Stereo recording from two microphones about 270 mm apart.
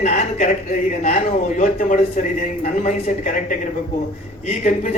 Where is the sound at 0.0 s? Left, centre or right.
Left.